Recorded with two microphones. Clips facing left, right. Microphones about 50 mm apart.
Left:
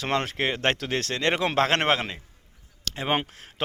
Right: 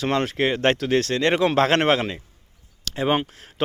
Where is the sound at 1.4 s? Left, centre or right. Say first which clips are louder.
Right 3 dB; centre.